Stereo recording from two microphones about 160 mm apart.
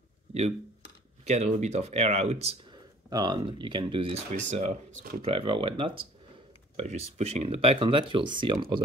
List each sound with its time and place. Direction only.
1.2 s speech: 45° right (ahead or behind)
2.7 s speech: 25° right (ahead or behind)
4.4 s speech: 45° right (ahead or behind)
5.2 s speech: 35° right (ahead or behind)